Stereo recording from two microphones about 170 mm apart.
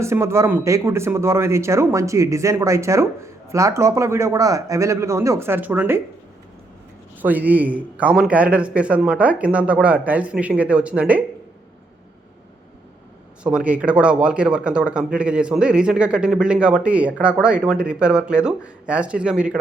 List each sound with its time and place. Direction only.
0.0 s a man's voice: 15° right (ahead or behind)
7.2 s a man's voice: 10° right (ahead or behind)
13.4 s speech: 5° right (ahead or behind)